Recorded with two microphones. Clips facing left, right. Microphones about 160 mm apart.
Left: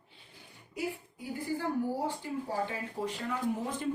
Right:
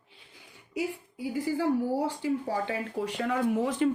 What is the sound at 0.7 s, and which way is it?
A woman's voice, 90° right.